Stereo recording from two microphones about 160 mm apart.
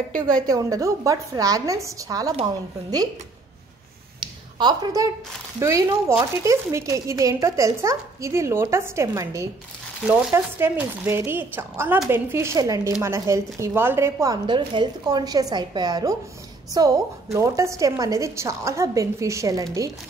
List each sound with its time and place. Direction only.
0.5 s a woman's voice: 20° right (ahead or behind)
4.2 s a sound: 25° right (ahead or behind)
5.6 s a woman's voice: 20° right (ahead or behind)
14.4 s a woman's voice: 30° right (ahead or behind)